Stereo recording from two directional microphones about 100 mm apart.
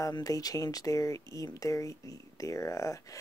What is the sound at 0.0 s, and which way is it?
Speech, 35° left (ahead or behind).